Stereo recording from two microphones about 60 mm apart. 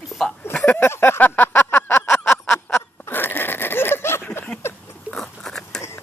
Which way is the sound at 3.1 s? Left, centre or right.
Left.